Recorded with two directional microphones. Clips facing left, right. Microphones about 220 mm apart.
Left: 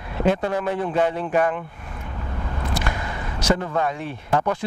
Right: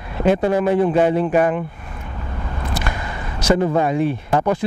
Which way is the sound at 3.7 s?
10° right (ahead or behind).